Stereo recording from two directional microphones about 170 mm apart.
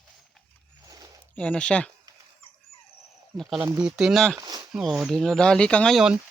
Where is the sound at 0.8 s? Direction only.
20° right (ahead or behind).